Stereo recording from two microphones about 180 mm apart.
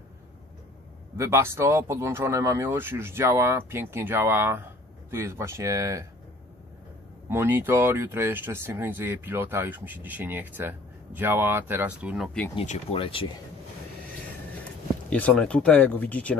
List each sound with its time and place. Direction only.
1.1 s speech: 15° right (ahead or behind)
7.2 s speech: 15° right (ahead or behind)
12.5 s speech: 30° left (ahead or behind)
15.0 s speech: 5° left (ahead or behind)